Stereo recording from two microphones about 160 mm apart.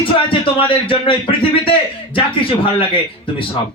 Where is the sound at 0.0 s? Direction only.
35° left (ahead or behind).